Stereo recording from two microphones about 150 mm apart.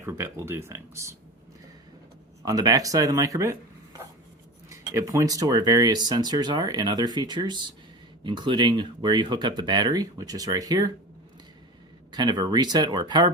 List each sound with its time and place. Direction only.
0.0 s speech: 15° right (ahead or behind)
2.4 s speech: 25° right (ahead or behind)
4.7 s speech: 20° right (ahead or behind)
12.1 s speech: 30° right (ahead or behind)